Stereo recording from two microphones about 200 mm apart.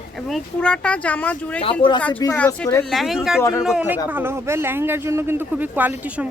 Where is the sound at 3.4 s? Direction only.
15° left (ahead or behind).